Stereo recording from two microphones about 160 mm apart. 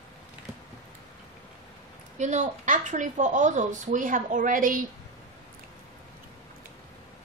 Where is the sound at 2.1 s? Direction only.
50° right (ahead or behind).